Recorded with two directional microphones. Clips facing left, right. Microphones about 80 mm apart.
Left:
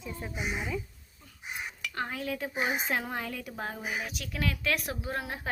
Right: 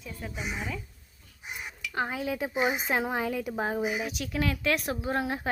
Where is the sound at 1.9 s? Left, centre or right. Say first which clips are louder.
Right 4 dB; centre.